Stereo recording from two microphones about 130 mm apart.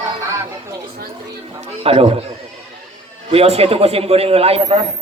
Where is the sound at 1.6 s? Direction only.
50° right (ahead or behind).